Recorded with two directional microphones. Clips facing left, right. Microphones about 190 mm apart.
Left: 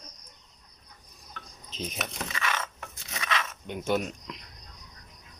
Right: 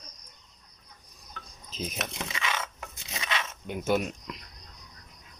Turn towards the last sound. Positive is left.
turn(degrees=-5)  # may be behind; listen again after turning